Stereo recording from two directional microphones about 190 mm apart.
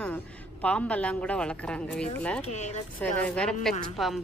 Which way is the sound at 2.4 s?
35° left (ahead or behind).